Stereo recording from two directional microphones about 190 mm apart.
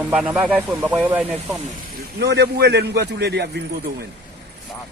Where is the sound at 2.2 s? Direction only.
60° right (ahead or behind).